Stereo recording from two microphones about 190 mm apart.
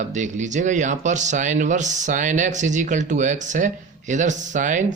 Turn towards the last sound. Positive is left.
turn(degrees=-40)  # may be behind; listen again after turning